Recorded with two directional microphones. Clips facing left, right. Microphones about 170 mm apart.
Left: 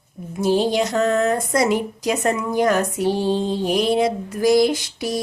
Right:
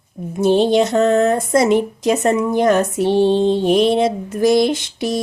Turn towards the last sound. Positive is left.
turn(degrees=-25)  # may be behind; listen again after turning